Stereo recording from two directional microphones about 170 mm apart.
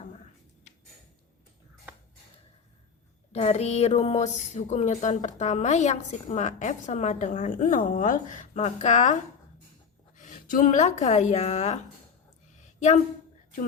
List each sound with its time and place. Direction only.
3.3 s speech: 40° left (ahead or behind)
10.2 s speech: 50° left (ahead or behind)